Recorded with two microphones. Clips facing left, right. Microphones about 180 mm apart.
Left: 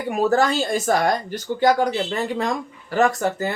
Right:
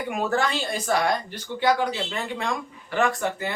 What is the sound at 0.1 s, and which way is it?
Speech, 40° left (ahead or behind).